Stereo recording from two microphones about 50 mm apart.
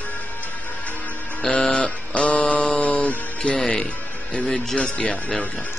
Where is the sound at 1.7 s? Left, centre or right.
Left.